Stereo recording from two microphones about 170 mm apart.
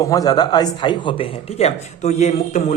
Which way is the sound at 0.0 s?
20° left (ahead or behind).